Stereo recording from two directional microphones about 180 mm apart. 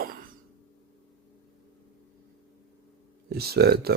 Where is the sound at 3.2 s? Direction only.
60° right (ahead or behind).